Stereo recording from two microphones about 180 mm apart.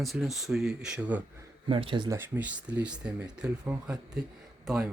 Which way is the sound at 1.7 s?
30° right (ahead or behind).